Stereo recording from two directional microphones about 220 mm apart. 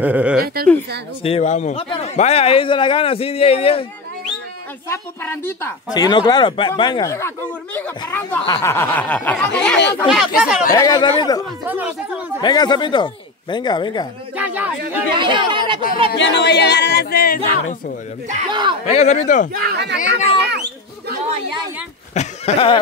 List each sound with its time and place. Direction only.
0.0 s speech: 5° right (ahead or behind)
1.2 s a man's voice: 30° left (ahead or behind)
4.8 s speech: 10° left (ahead or behind)
10.7 s a man's voice: 15° left (ahead or behind)
14.3 s a sound: 5° right (ahead or behind)
15.1 s speech: 20° right (ahead or behind)
16.1 s speech: 50° left (ahead or behind)
18.5 s speech: 20° right (ahead or behind)
18.9 s speech: 30° left (ahead or behind)
19.5 s speech: 45° right (ahead or behind)
22.1 s a sound: 30° left (ahead or behind)